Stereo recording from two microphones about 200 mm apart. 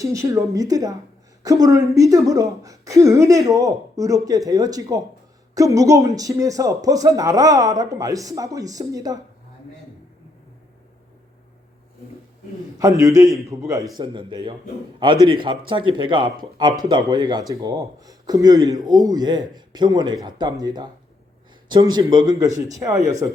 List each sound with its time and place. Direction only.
0.0 s a woman's voice: 15° right (ahead or behind)
12.8 s a woman's voice: 15° right (ahead or behind)